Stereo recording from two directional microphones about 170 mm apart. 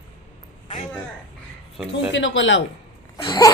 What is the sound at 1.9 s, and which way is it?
Speech, 90° left.